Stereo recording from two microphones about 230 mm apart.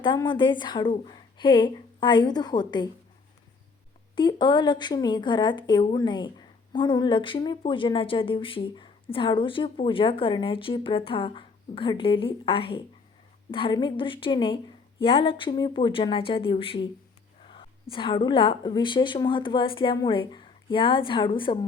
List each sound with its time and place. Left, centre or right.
0.0 s speech: centre
4.1 s speech: centre